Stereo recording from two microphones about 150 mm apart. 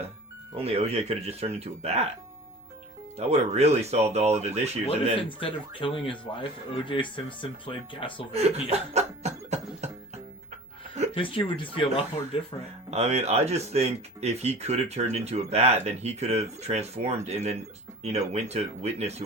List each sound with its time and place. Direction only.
0.5 s speech: 40° right (ahead or behind)
3.2 s speech: 45° right (ahead or behind)
5.4 s speech: 35° left (ahead or behind)
8.3 s music: 45° right (ahead or behind)
11.1 s speech: 35° left (ahead or behind)
12.9 s speech: 45° right (ahead or behind)